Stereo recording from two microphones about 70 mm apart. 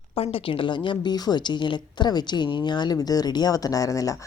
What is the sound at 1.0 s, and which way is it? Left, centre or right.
Speech, left.